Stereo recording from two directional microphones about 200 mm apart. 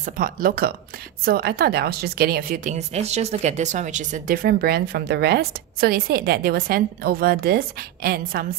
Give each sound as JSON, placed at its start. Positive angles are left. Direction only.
{"t": 0.0, "sound": "a woman's voice", "side_deg": -45}